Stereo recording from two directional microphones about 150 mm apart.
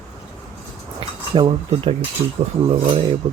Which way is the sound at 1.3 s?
40° right (ahead or behind).